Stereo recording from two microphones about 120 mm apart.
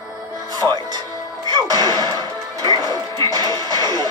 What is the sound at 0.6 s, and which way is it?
Speech, 10° right (ahead or behind).